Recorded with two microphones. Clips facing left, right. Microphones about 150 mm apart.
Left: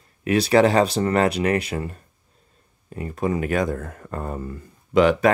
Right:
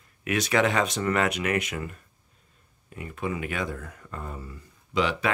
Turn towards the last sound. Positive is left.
turn(degrees=45)  # may be behind; listen again after turning